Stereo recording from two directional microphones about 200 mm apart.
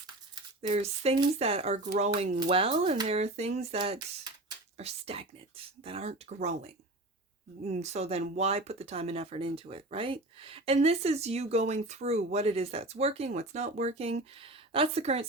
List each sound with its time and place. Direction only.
0.6 s speech: 30° right (ahead or behind)
4.8 s speech: 30° right (ahead or behind)